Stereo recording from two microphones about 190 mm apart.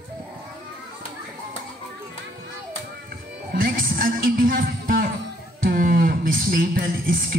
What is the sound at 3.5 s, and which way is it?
Music, 50° right (ahead or behind).